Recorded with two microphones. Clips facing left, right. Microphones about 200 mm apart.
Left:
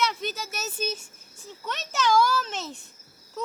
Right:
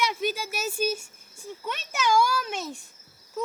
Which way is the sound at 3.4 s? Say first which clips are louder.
Right 2 dB; 10° right (ahead or behind).